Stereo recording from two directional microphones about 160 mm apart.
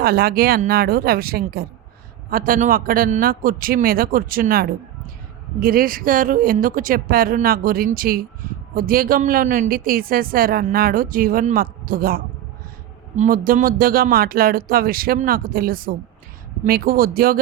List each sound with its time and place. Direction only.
0.0 s speech: 75° right (ahead or behind)
2.3 s a woman's voice: 60° right (ahead or behind)